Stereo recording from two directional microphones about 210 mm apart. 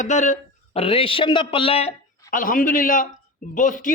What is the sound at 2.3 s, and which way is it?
Speech, 40° left (ahead or behind).